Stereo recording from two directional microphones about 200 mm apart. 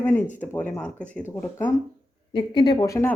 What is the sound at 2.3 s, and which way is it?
Speech, 25° left (ahead or behind).